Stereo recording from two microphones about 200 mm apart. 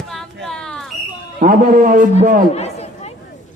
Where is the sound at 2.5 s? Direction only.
30° left (ahead or behind).